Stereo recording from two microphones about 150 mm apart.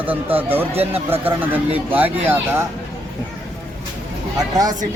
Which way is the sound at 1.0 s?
10° right (ahead or behind).